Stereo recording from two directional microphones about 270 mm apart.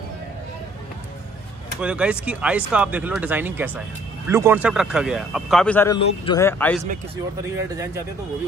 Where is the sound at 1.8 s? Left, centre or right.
Centre.